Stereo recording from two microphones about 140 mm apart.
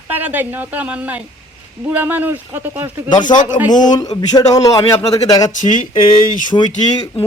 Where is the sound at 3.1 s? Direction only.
30° left (ahead or behind).